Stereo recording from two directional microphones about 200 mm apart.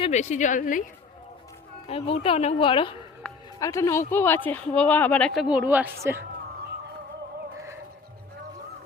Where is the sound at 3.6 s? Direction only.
15° left (ahead or behind).